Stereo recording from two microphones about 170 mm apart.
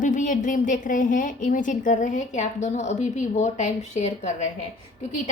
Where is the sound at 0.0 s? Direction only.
50° left (ahead or behind).